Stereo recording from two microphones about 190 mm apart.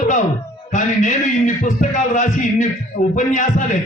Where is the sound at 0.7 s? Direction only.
40° left (ahead or behind).